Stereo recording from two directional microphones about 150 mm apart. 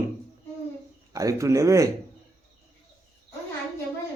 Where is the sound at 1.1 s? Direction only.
20° right (ahead or behind).